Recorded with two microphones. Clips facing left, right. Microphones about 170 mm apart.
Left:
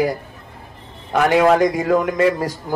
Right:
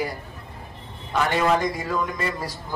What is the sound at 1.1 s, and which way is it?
A man's voice, 65° left (ahead or behind).